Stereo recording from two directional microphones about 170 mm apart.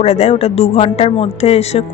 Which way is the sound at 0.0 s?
40° left (ahead or behind).